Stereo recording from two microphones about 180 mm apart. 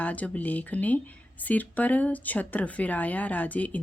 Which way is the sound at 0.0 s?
10° left (ahead or behind).